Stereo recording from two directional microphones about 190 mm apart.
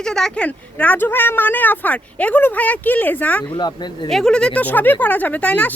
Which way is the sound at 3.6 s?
20° left (ahead or behind).